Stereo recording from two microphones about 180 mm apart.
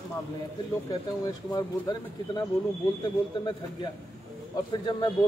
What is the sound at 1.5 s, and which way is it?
Speech, 25° left (ahead or behind).